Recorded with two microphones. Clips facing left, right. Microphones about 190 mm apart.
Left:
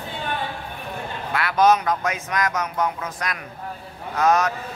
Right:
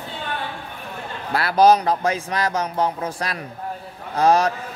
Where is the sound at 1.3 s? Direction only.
35° right (ahead or behind).